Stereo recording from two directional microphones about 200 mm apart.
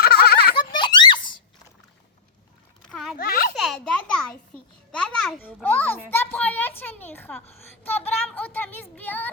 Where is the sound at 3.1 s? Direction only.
45° left (ahead or behind).